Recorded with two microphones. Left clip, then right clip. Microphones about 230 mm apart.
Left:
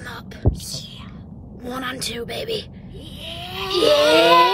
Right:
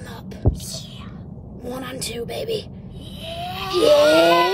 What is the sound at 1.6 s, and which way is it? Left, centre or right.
Speech, centre.